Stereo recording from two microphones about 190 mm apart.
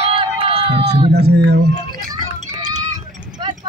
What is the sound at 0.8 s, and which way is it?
Speech, 60° right (ahead or behind).